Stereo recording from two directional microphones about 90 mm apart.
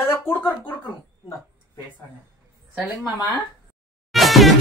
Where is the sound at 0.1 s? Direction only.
25° left (ahead or behind).